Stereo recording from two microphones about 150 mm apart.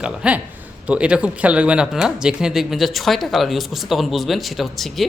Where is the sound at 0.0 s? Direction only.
5° right (ahead or behind).